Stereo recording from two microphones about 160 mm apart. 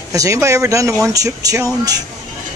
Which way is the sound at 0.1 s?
20° right (ahead or behind).